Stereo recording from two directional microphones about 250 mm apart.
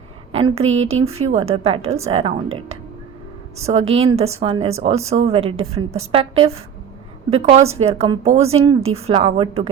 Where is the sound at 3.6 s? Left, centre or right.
Right.